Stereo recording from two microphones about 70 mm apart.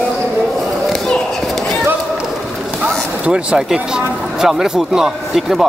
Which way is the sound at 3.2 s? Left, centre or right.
Centre.